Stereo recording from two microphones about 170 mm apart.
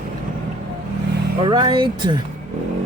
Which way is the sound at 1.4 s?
30° right (ahead or behind).